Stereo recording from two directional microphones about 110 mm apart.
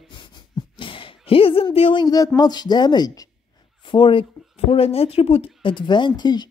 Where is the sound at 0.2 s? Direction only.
45° left (ahead or behind).